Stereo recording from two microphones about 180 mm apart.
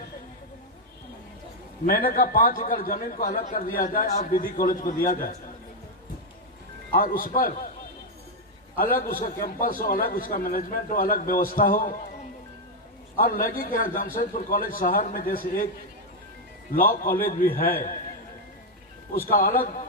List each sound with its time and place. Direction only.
1.9 s a man's voice: 55° left (ahead or behind)
6.9 s a man's voice: 50° left (ahead or behind)
8.7 s a man's voice: 50° left (ahead or behind)
13.1 s a man's voice: 50° left (ahead or behind)
16.7 s a man's voice: 50° left (ahead or behind)
19.1 s a man's voice: 50° left (ahead or behind)